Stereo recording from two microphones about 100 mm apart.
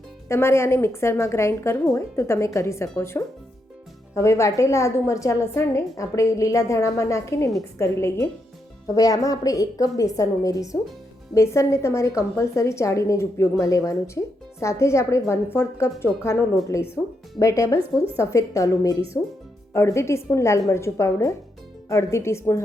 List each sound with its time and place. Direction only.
0.3 s a woman's voice: 25° left (ahead or behind)